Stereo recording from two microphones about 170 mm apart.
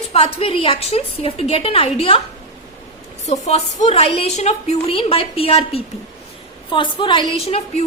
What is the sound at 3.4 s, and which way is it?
A woman's voice, 40° left (ahead or behind).